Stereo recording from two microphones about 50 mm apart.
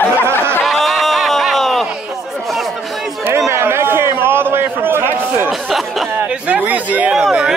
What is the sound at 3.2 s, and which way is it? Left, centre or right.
A man's voice, right.